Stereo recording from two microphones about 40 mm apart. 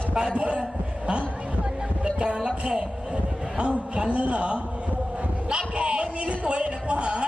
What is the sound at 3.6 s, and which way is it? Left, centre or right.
A man's voice, right.